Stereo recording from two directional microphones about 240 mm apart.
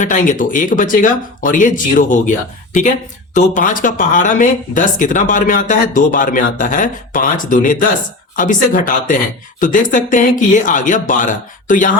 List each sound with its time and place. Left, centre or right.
0.0 s speech: left
3.3 s speech: left